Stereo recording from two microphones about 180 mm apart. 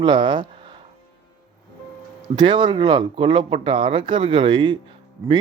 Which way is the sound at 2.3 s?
25° right (ahead or behind).